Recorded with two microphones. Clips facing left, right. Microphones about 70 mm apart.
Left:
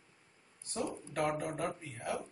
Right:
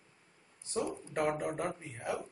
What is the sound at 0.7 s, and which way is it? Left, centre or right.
Speech, centre.